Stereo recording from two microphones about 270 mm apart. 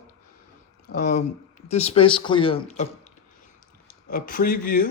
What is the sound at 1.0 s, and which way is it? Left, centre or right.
A man's voice, left.